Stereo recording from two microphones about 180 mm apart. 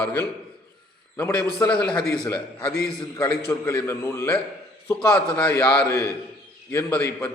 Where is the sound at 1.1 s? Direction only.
10° left (ahead or behind).